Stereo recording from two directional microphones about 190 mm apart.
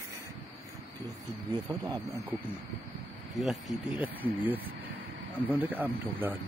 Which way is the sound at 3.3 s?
Centre (ahead or behind).